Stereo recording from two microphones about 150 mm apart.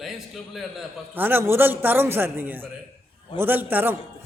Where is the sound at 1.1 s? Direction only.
15° right (ahead or behind).